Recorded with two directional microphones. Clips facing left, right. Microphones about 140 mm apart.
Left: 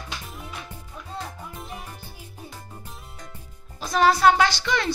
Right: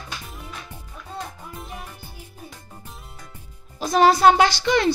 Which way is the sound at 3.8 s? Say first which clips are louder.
Right 3 dB; 25° right (ahead or behind).